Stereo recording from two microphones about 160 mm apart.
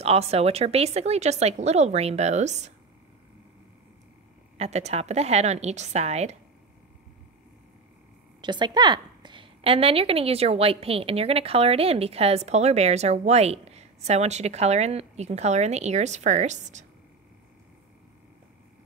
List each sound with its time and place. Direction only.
0.0 s speech: 40° right (ahead or behind)
4.6 s speech: 45° right (ahead or behind)
8.4 s a woman's voice: 30° right (ahead or behind); by 16.8 s 50° right (ahead or behind)